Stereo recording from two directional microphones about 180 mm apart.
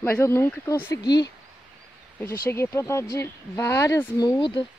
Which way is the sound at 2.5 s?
15° left (ahead or behind).